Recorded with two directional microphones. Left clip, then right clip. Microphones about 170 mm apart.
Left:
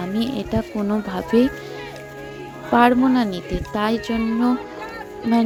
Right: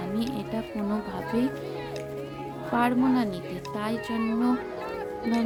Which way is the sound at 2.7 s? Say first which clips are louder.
Left 9 dB; 40° left (ahead or behind).